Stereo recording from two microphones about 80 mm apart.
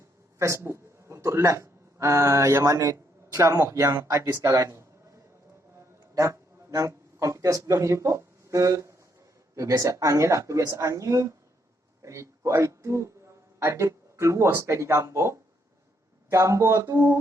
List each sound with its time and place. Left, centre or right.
0.3 s speech: right
4.4 s a sound: right
6.1 s a man's voice: right